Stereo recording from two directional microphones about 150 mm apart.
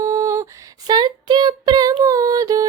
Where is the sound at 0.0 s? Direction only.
20° right (ahead or behind).